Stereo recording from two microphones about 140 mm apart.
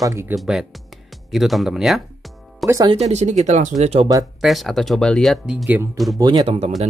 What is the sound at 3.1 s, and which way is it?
Speech, 55° right (ahead or behind).